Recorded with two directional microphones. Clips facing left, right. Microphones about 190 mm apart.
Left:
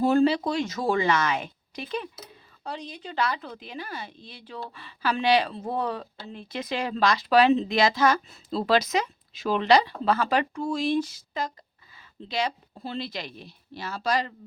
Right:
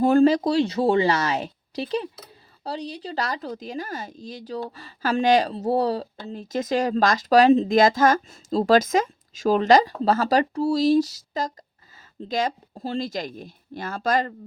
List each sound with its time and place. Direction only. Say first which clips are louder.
0.0 s speech: right 4 dB; 50° right (ahead or behind)